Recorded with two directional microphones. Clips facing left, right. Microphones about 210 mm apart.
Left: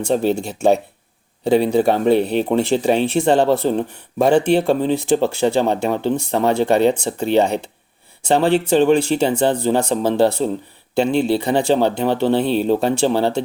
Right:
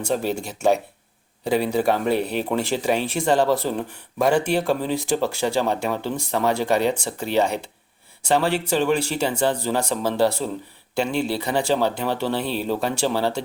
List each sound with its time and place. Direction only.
0.3 s speech: 25° left (ahead or behind)